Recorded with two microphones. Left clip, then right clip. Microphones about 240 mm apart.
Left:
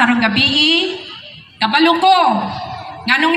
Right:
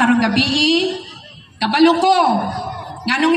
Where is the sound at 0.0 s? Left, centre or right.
Centre.